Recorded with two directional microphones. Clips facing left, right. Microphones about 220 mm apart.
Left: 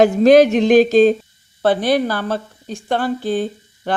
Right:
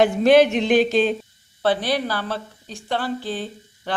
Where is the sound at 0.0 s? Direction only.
40° left (ahead or behind).